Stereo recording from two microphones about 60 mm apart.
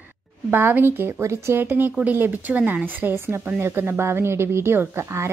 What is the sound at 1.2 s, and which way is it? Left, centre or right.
Speech, right.